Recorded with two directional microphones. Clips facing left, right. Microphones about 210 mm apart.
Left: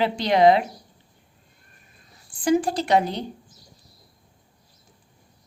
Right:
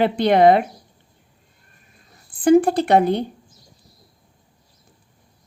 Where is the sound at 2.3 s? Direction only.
55° right (ahead or behind).